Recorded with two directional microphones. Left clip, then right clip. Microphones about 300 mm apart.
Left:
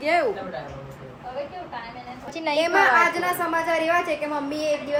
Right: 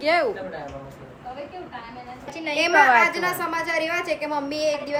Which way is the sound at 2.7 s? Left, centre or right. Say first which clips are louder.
Right 3 dB; right.